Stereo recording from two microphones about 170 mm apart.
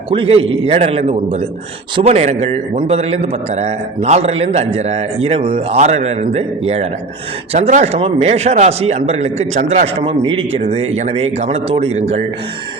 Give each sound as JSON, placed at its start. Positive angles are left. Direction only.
{"t": 0.1, "sound": "a man's voice", "side_deg": -35}